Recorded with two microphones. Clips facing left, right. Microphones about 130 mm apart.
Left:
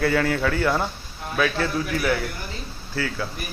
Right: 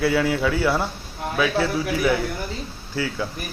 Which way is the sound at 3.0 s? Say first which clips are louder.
Right 1 dB; 15° right (ahead or behind).